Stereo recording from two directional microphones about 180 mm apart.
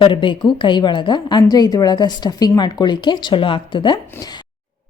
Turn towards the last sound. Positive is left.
turn(degrees=25)  # may be behind; listen again after turning